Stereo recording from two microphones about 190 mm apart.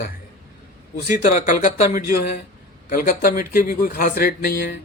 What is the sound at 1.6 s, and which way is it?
A man's voice, 50° left (ahead or behind).